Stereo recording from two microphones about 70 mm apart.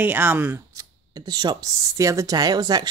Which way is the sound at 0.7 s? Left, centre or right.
Right.